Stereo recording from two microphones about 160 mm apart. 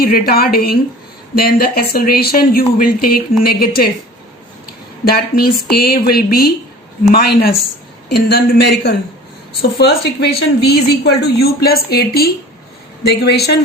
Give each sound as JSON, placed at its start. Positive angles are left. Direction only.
{"t": 0.0, "sound": "speech", "side_deg": 70}
{"t": 5.0, "sound": "a man's voice", "side_deg": 70}
{"t": 13.0, "sound": "a man's voice", "side_deg": 90}